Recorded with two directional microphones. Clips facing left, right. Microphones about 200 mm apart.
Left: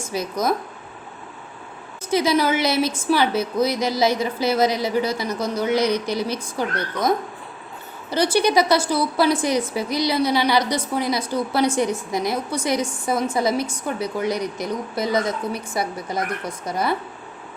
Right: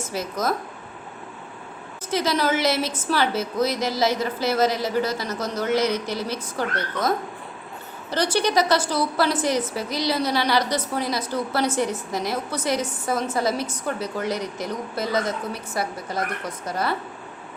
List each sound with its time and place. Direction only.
0.0 s a woman's voice: 15° left (ahead or behind)
2.0 s a woman's voice: 10° left (ahead or behind)
8.1 s a woman's voice: 10° left (ahead or behind)